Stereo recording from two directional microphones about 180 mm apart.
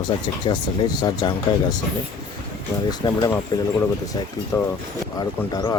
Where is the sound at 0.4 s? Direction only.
25° left (ahead or behind).